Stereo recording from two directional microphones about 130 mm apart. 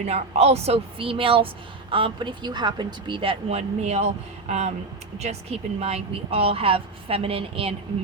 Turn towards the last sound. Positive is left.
turn(degrees=-45)  # may be behind; listen again after turning